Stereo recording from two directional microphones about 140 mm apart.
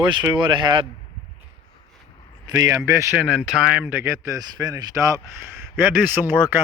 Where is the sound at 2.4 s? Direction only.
25° right (ahead or behind).